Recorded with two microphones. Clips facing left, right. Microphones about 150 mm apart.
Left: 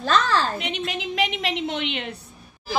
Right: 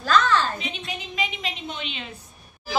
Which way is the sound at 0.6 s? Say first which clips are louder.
Left 5 dB; 75° left (ahead or behind).